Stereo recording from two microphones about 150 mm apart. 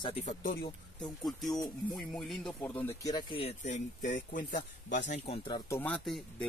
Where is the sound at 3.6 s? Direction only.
55° left (ahead or behind).